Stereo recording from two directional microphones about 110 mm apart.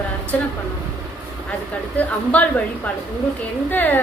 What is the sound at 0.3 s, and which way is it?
Speech, 10° left (ahead or behind).